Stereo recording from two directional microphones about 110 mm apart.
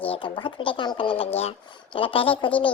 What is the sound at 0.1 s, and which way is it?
A child's voice, 45° left (ahead or behind).